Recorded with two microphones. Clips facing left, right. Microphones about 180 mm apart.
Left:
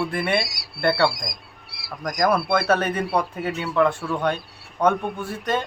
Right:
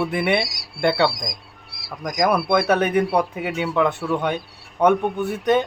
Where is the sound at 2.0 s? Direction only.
15° right (ahead or behind).